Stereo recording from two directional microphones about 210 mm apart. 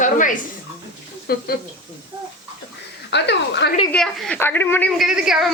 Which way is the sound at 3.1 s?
55° left (ahead or behind).